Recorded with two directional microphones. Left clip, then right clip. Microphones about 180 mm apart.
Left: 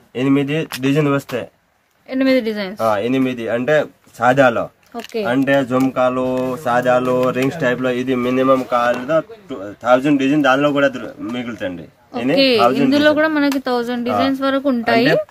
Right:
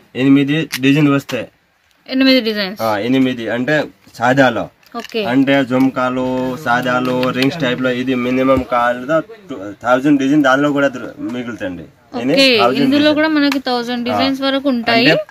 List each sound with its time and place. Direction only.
0.1 s speech: centre (ahead or behind); by 7.3 s 25° left (ahead or behind)
7.4 s speech: 10° left (ahead or behind)